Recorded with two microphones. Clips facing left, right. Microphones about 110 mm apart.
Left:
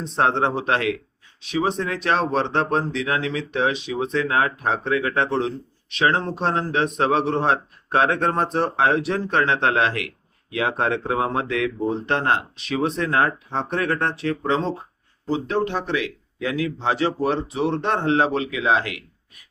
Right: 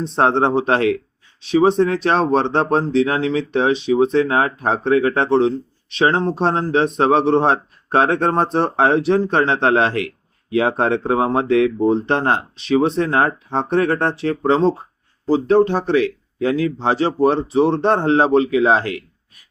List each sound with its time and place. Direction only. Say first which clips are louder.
0.2 s speech: right 5 dB; 30° right (ahead or behind)